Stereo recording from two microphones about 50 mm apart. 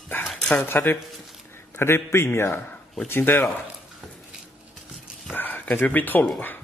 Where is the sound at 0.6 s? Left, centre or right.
Left.